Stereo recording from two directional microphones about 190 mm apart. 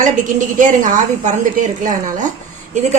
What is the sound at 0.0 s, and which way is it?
A woman's voice, 40° right (ahead or behind).